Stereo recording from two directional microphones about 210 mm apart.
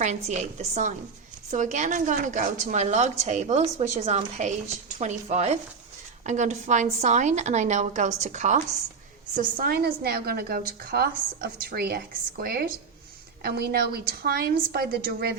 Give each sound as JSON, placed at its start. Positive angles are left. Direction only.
{"t": 0.0, "sound": "a woman's voice", "side_deg": -30}